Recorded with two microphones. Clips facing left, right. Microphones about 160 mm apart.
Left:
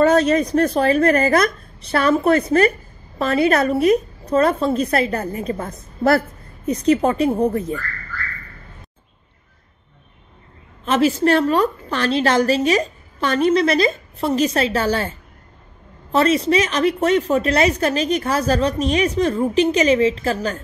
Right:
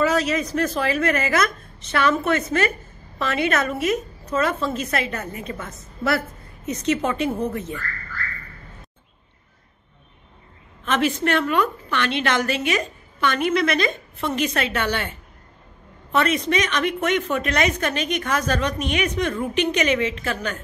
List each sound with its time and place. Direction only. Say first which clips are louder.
0.1 s a woman's voice: left 7 dB; 35° left (ahead or behind)
10.9 s a woman's voice: left 5 dB; 35° left (ahead or behind)